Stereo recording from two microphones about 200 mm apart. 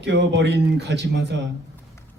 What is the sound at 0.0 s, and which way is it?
Speech, 60° right (ahead or behind).